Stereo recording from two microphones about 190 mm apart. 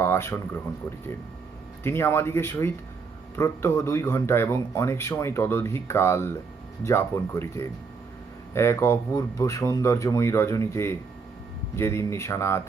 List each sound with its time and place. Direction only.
0.0 s speech: 15° left (ahead or behind)
1.8 s speech: 10° left (ahead or behind)